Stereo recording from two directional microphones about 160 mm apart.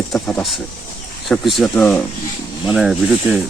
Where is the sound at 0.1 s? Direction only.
5° left (ahead or behind).